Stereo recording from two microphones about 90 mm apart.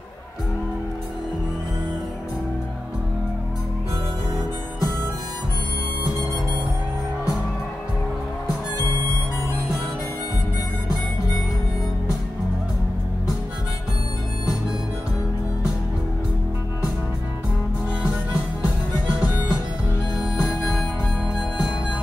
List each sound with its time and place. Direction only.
19.1 s music: 10° right (ahead or behind)